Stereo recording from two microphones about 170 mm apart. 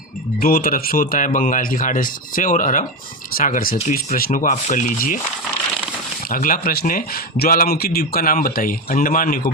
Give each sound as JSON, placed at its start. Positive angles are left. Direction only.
{"t": 0.3, "sound": "a man's voice", "side_deg": 55}
{"t": 6.2, "sound": "speech", "side_deg": 55}